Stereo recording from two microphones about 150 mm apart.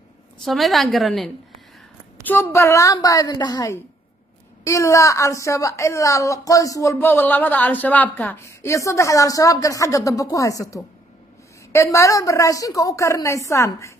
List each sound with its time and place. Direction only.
0.4 s a woman's voice: centre (ahead or behind)
2.2 s a woman's voice: 15° left (ahead or behind)